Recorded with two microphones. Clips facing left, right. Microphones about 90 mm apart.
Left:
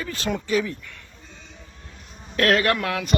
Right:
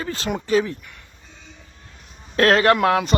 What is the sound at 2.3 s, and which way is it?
Speech, 35° right (ahead or behind).